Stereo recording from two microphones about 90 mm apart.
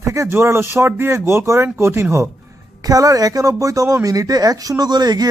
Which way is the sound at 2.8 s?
40° right (ahead or behind).